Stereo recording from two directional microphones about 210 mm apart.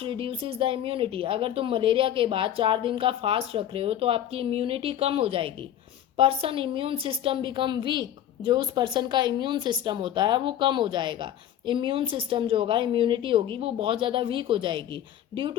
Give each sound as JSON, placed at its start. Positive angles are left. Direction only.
{"t": 0.0, "sound": "speech", "side_deg": -25}